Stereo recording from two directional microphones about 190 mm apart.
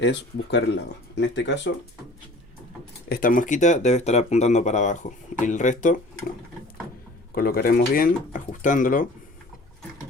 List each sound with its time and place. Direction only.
0.0 s speech: 65° left (ahead or behind)
3.1 s speech: 45° left (ahead or behind)
7.3 s speech: 50° left (ahead or behind)